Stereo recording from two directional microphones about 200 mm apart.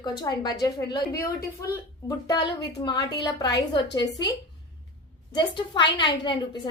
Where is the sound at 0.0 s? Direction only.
20° left (ahead or behind).